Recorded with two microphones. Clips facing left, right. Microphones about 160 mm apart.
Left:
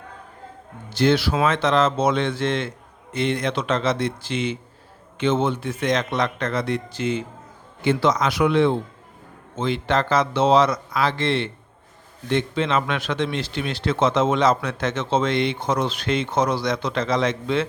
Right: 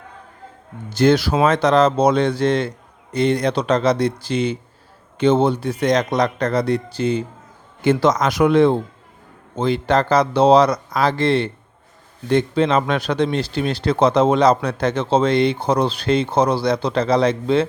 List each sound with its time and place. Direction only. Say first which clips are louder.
0.9 s speech: right 4 dB; 45° right (ahead or behind)
7.8 s a man's voice: right 4 dB; 45° right (ahead or behind)